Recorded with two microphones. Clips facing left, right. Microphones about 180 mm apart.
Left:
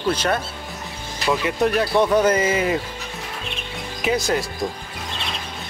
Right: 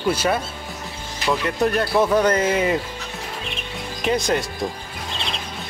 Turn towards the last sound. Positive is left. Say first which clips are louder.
# even
turn(degrees=0)  # may be behind; listen again after turning